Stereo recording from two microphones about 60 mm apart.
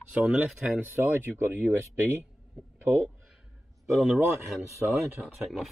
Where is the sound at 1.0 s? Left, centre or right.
Right.